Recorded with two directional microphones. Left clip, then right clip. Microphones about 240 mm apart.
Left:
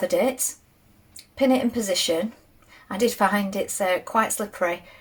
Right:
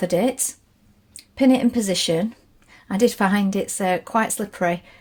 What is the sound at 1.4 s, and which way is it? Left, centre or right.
Speech, right.